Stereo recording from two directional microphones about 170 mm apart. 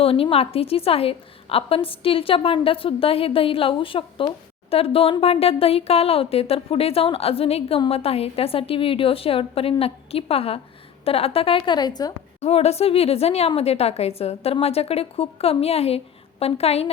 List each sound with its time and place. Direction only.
0.0 s speech: 35° left (ahead or behind)
12.4 s speech: 40° left (ahead or behind)